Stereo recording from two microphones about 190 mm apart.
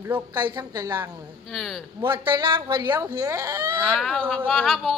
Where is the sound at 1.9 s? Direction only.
25° right (ahead or behind).